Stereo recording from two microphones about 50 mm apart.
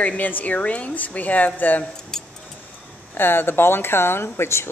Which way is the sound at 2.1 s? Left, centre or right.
Centre.